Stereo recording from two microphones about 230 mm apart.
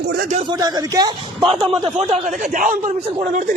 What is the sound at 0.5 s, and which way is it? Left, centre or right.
Speech, centre.